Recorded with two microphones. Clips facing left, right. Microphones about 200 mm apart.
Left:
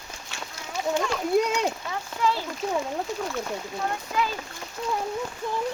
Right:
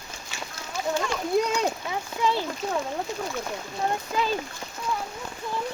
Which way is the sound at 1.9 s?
20° right (ahead or behind).